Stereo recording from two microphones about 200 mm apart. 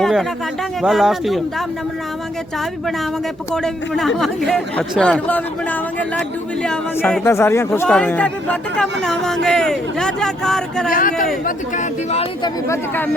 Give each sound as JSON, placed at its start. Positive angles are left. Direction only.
{"t": 0.0, "sound": "speech", "side_deg": 0}
{"t": 3.5, "sound": "speech", "side_deg": 0}
{"t": 10.9, "sound": "speech", "side_deg": 40}
{"t": 12.4, "sound": "speech", "side_deg": 15}